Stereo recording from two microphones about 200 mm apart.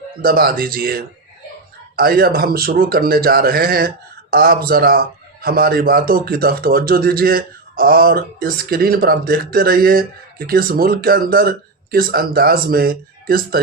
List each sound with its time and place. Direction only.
0.2 s a man's voice: 50° right (ahead or behind)